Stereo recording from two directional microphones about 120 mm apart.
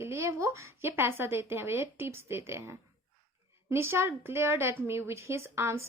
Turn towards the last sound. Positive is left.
turn(degrees=-20)  # may be behind; listen again after turning